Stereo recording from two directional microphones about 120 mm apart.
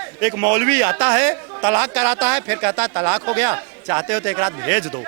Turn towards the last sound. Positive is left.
turn(degrees=-25)  # may be behind; listen again after turning